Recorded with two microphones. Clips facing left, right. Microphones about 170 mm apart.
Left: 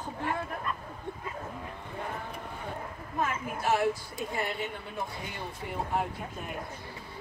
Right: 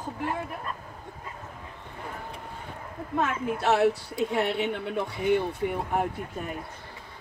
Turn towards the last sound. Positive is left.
turn(degrees=-60)  # may be behind; listen again after turning